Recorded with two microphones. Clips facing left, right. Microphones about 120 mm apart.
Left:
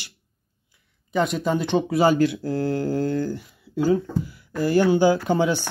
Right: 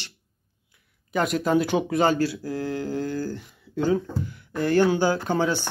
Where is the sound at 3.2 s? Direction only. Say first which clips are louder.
Left 3 dB; 10° left (ahead or behind).